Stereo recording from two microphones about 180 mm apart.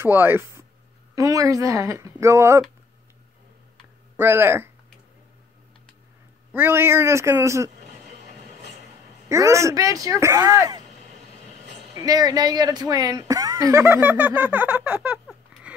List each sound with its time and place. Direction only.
0.0 s speech: 10° right (ahead or behind)
4.2 s speech: 10° right (ahead or behind)
6.5 s speech: 15° right (ahead or behind)
9.3 s speech: 15° right (ahead or behind)
11.9 s speech: 20° right (ahead or behind)